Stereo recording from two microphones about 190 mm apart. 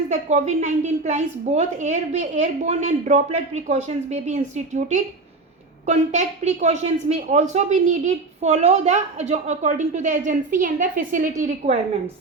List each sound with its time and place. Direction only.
0.1 s a woman's voice: 35° right (ahead or behind)